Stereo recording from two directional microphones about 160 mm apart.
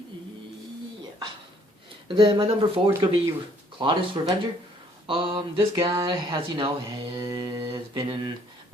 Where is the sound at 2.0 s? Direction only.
30° right (ahead or behind).